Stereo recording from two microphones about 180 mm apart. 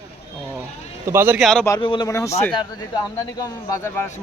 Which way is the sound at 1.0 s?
10° right (ahead or behind).